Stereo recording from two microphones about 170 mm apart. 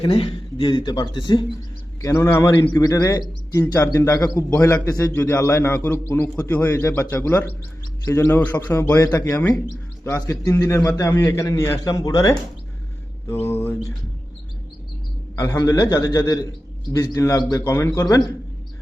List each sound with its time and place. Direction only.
0.0 s a man's voice: 30° left (ahead or behind); by 13.9 s 15° left (ahead or behind)
15.4 s a man's voice: 20° left (ahead or behind)